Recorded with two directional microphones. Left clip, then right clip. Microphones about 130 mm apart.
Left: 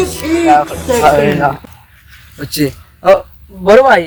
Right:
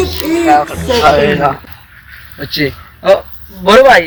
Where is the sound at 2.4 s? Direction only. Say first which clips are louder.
Right 1 dB; 75° left (ahead or behind).